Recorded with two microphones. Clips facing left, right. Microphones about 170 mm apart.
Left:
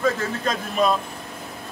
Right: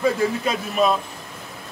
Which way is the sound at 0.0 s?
10° right (ahead or behind).